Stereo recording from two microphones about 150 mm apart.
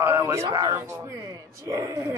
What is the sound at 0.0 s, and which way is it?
Speech, 20° right (ahead or behind).